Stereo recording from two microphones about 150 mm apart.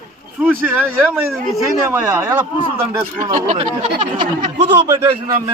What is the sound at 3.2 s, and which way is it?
Speech, 55° right (ahead or behind).